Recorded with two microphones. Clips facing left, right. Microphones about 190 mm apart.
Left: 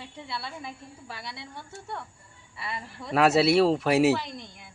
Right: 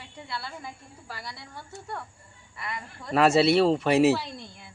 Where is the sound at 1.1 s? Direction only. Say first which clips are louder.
Even; centre (ahead or behind).